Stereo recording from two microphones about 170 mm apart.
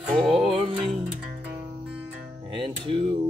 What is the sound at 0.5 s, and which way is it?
Music, 30° right (ahead or behind).